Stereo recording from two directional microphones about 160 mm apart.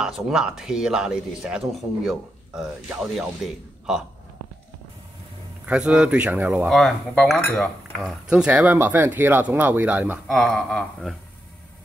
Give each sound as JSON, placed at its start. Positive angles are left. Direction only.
{"t": 0.0, "sound": "speech", "side_deg": -5}
{"t": 5.7, "sound": "speech", "side_deg": -5}
{"t": 6.7, "sound": "speech", "side_deg": 0}
{"t": 7.5, "sound": "cutlery", "side_deg": 10}
{"t": 8.0, "sound": "speech", "side_deg": -5}
{"t": 10.2, "sound": "speech", "side_deg": 0}